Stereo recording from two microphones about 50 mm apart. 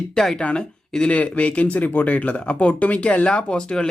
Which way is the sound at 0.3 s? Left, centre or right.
Centre.